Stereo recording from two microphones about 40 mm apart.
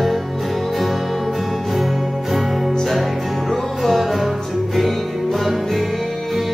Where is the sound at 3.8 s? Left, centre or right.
Centre.